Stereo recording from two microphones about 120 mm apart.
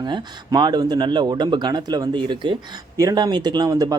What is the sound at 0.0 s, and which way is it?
Speech, 35° right (ahead or behind).